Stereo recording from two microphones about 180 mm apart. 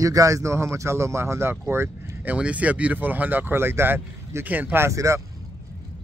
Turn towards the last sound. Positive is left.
turn(degrees=-15)  # may be behind; listen again after turning